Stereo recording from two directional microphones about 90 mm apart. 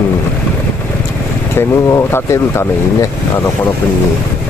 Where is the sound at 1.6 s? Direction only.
30° left (ahead or behind).